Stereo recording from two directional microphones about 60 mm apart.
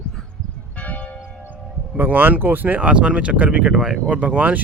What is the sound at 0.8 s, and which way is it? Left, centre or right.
Church bell, left.